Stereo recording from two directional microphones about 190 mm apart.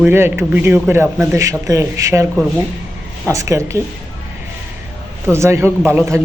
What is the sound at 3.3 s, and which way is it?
Speech, 15° right (ahead or behind).